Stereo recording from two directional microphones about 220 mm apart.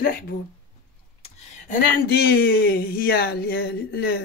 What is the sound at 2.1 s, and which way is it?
Speech, 45° left (ahead or behind).